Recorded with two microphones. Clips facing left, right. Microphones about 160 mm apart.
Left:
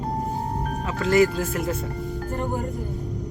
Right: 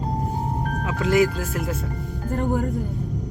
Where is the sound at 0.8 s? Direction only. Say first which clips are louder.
Even; 15° right (ahead or behind).